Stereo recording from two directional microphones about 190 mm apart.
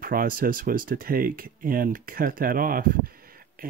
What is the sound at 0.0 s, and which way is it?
Speech, 50° right (ahead or behind).